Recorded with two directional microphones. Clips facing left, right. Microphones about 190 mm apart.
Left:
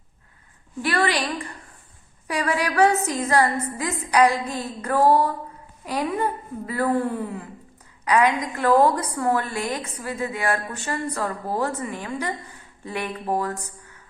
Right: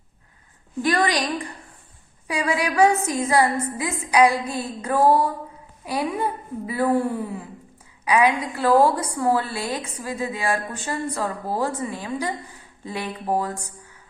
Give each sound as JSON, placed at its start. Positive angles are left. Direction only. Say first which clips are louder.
{"t": 0.9, "sound": "a woman's voice", "louder": "right 1 dB", "side_deg": -15}